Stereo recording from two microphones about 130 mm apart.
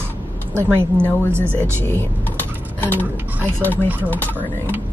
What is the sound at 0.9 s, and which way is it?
Speech, 15° left (ahead or behind).